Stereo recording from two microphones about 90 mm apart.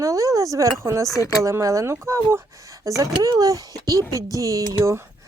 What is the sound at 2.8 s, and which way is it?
Speech, 40° right (ahead or behind).